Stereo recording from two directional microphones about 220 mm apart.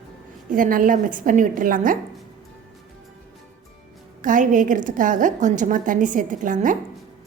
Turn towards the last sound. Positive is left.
turn(degrees=-35)  # may be behind; listen again after turning